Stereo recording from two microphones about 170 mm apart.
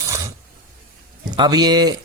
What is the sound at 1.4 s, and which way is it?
Speech, 25° right (ahead or behind).